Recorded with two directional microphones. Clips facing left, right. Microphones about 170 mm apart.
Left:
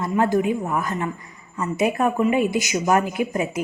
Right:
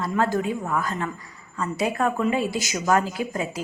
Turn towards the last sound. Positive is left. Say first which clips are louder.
# left 3 dB
turn(degrees=20)  # may be behind; listen again after turning